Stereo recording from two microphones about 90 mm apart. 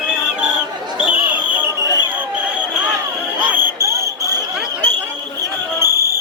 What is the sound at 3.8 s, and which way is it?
Cricket, 35° right (ahead or behind).